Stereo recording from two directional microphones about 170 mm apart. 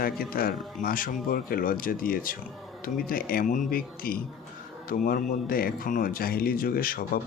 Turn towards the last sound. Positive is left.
turn(degrees=55)  # may be behind; listen again after turning